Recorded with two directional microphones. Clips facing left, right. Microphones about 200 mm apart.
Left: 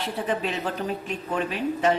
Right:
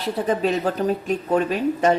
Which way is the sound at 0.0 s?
40° right (ahead or behind).